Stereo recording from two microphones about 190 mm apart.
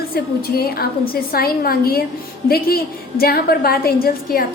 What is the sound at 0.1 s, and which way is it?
A woman's voice, 55° left (ahead or behind).